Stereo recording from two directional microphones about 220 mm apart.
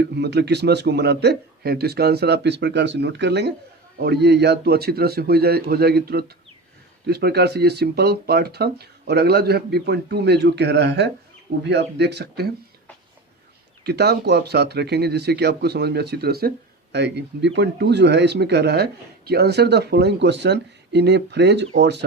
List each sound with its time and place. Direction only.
0.0 s speech: 50° right (ahead or behind)
13.8 s speech: 50° right (ahead or behind)